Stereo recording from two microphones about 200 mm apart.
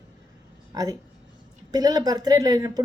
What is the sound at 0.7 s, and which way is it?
A woman's voice, 20° right (ahead or behind).